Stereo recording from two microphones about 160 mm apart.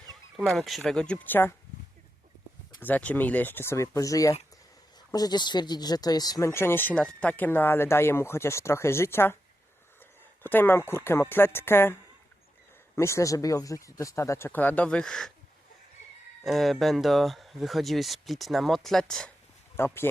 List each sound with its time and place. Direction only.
0.3 s speech: centre (ahead or behind)
2.8 s speech: 10° left (ahead or behind)
10.4 s speech: 15° left (ahead or behind)
13.0 s speech: 20° left (ahead or behind)
16.4 s speech: centre (ahead or behind)
19.7 s speech: 15° left (ahead or behind)